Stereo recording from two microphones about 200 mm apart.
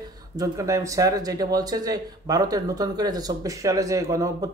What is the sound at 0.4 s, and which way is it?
Speech, 15° right (ahead or behind).